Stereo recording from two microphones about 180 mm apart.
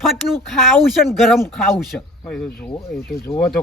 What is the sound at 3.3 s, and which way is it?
Speech, 30° left (ahead or behind).